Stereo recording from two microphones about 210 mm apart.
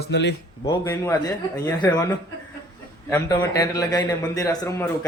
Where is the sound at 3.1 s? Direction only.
15° left (ahead or behind).